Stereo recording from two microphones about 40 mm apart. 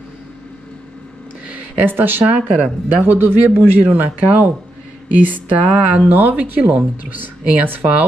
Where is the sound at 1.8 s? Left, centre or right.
Right.